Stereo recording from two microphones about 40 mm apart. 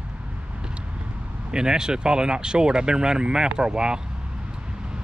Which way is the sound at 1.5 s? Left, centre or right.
Centre.